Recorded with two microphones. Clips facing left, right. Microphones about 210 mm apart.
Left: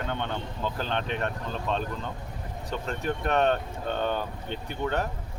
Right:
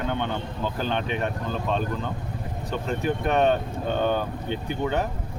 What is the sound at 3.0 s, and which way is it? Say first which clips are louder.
Speech: right 3 dB; 5° right (ahead or behind).